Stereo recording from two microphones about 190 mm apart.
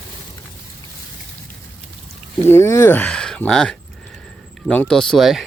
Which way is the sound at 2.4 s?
15° left (ahead or behind).